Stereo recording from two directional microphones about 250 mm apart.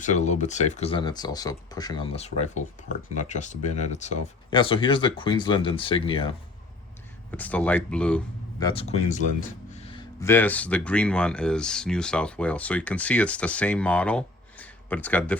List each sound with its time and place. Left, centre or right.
0.0 s speech: left
7.3 s speech: centre
8.5 s speech: centre
9.7 s a sound: left
10.2 s speech: centre